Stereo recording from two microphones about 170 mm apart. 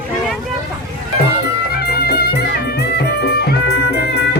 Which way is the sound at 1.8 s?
70° left (ahead or behind).